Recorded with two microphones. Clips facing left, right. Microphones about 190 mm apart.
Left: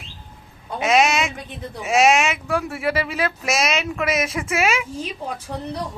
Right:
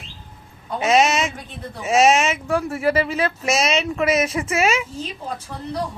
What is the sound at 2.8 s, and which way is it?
A woman's voice, 30° right (ahead or behind).